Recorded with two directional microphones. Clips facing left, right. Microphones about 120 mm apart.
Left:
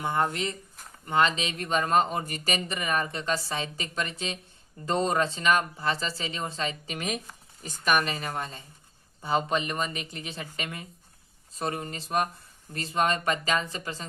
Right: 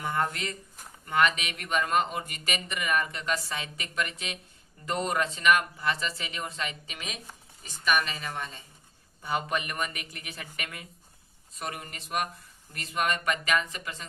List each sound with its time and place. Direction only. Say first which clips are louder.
0.0 s speech: left 3 dB; 25° left (ahead or behind); by 8.6 s 40° left (ahead or behind)
9.2 s speech: left 4 dB; 25° left (ahead or behind)